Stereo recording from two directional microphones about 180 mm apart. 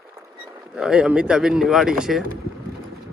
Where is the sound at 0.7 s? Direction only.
5° right (ahead or behind).